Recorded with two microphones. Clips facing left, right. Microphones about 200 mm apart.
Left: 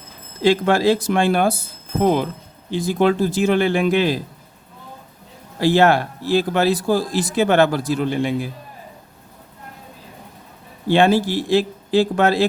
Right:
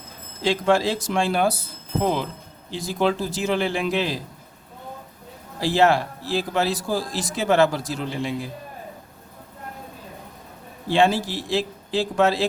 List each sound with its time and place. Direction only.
0.4 s a man's voice: 60° left (ahead or behind)
5.5 s a man's voice: 60° left (ahead or behind)
10.9 s a man's voice: 60° left (ahead or behind)